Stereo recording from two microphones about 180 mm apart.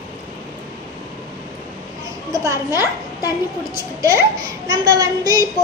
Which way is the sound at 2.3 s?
20° right (ahead or behind).